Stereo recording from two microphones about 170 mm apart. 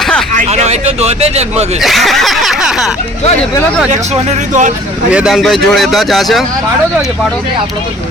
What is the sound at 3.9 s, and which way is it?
Speech, 40° right (ahead or behind).